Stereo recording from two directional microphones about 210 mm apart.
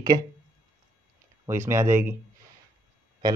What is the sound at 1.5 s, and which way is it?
Speech, 10° right (ahead or behind).